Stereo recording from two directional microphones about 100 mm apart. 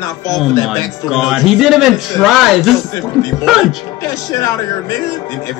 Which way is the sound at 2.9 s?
30° left (ahead or behind).